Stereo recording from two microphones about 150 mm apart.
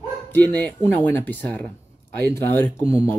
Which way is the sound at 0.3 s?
10° left (ahead or behind).